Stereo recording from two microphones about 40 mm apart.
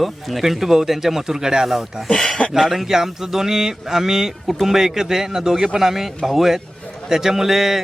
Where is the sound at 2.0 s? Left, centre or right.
Centre.